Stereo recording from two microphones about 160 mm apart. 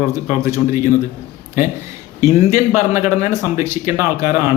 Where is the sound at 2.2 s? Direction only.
20° right (ahead or behind).